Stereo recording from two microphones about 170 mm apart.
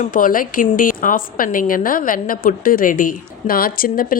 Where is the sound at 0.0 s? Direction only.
50° left (ahead or behind).